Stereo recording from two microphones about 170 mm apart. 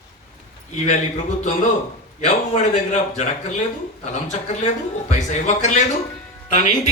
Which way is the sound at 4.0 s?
45° left (ahead or behind).